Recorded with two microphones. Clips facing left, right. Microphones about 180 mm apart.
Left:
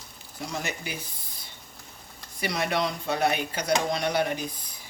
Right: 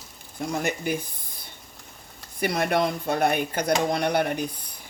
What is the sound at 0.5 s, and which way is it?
Speech, 55° right (ahead or behind).